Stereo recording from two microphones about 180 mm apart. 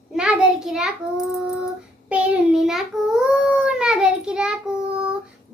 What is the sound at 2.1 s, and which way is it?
Child singing, 5° right (ahead or behind).